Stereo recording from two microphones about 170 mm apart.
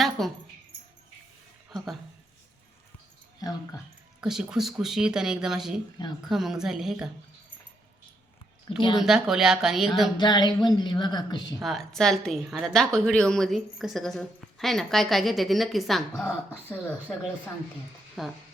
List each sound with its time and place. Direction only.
0.2 s a woman's voice: centre (ahead or behind)
1.7 s a woman's voice: centre (ahead or behind)
4.2 s a woman's voice: 5° right (ahead or behind)
9.0 s a woman's voice: 5° right (ahead or behind)
10.2 s a woman's voice: 25° left (ahead or behind)
11.6 s a woman's voice: centre (ahead or behind)
18.2 s a woman's voice: centre (ahead or behind)